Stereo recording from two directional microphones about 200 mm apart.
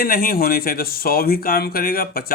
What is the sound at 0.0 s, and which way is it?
Speech, 45° left (ahead or behind).